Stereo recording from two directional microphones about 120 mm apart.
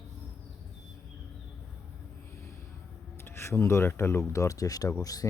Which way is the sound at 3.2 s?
20° left (ahead or behind).